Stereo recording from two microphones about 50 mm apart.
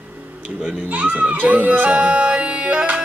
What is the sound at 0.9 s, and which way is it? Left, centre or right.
Music, right.